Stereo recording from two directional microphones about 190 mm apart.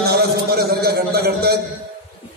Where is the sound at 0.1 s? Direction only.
55° right (ahead or behind).